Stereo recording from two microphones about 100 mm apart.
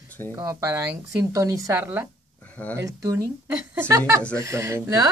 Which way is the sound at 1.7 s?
20° right (ahead or behind).